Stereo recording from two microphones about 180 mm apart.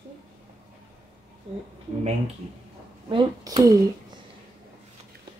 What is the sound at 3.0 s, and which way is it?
Speech, 25° right (ahead or behind).